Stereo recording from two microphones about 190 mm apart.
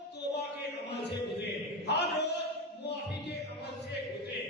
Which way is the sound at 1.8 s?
60° left (ahead or behind).